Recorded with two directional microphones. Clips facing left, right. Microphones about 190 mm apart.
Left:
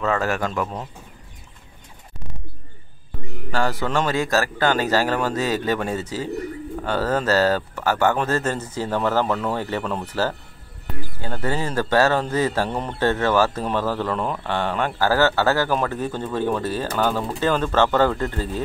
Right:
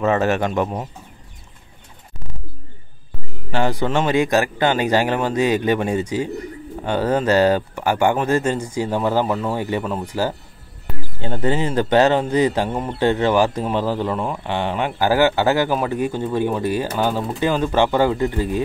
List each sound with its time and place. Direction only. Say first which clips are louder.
0.0 s speech: right 4 dB; 20° right (ahead or behind)
3.5 s a man's voice: right 3 dB; 20° right (ahead or behind)
12.6 s a man's voice: right 3 dB; 5° right (ahead or behind)